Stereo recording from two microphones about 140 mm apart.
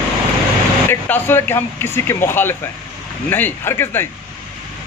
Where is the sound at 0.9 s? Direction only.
15° left (ahead or behind).